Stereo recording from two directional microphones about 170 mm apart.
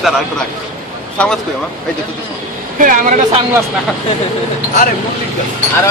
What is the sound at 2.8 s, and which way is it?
Speech, 50° right (ahead or behind).